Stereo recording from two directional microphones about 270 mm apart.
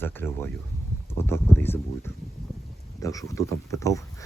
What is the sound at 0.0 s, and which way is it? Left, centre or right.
Speech, centre.